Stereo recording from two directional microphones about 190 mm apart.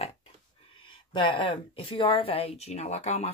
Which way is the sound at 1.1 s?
25° left (ahead or behind).